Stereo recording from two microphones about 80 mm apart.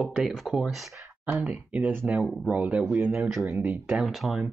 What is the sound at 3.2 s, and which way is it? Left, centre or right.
Speech, centre.